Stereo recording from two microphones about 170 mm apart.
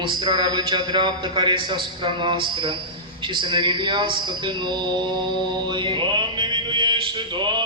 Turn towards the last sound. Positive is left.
turn(degrees=-25)  # may be behind; listen again after turning